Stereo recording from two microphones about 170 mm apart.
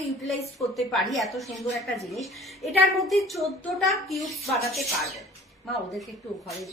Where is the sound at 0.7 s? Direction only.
Centre (ahead or behind).